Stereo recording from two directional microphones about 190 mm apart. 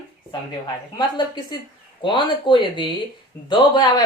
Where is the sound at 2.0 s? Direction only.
25° left (ahead or behind).